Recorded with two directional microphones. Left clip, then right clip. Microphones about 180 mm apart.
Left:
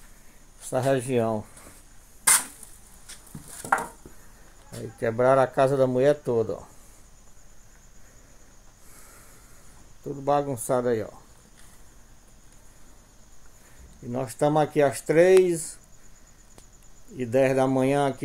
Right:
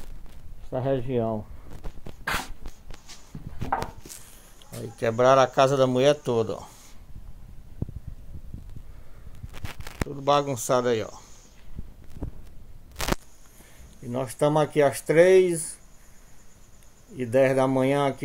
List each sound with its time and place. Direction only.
0.7 s speech: 15° left (ahead or behind)
4.6 s speech: 5° left (ahead or behind)
10.0 s speech: centre (ahead or behind)
14.0 s speech: centre (ahead or behind)
17.2 s speech: centre (ahead or behind)